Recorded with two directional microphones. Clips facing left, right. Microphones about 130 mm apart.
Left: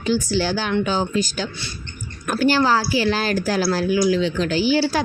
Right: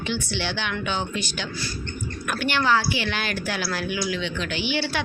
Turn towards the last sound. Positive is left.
turn(degrees=40)  # may be behind; listen again after turning